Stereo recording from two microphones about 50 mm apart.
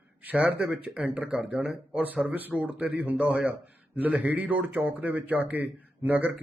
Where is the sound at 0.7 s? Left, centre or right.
Right.